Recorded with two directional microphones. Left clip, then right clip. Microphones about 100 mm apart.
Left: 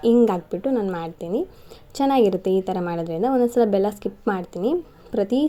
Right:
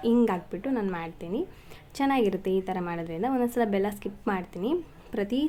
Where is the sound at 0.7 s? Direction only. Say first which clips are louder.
Left 6 dB; 30° left (ahead or behind).